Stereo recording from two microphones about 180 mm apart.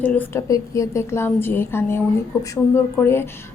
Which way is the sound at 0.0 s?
10° left (ahead or behind).